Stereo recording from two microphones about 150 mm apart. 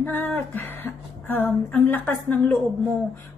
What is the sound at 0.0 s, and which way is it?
A woman's voice, 15° left (ahead or behind).